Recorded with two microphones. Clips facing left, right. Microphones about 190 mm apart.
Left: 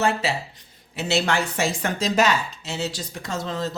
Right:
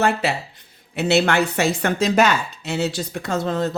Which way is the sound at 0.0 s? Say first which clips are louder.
Right 3 dB; 60° right (ahead or behind).